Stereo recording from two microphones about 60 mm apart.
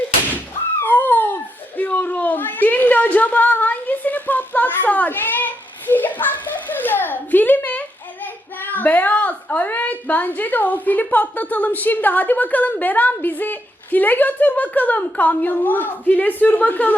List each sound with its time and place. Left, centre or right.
0.9 s dog: left
6.8 s a child's voice: left